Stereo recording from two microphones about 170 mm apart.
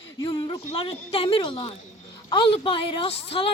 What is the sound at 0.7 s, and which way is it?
A woman's voice, 35° left (ahead or behind).